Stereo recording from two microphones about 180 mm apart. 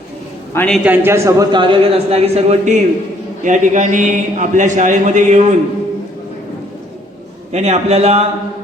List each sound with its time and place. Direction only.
0.5 s a man's voice: 10° left (ahead or behind)
0.9 s a man's voice: 15° right (ahead or behind); by 5.5 s 40° right (ahead or behind)
7.5 s a man's voice: 40° right (ahead or behind)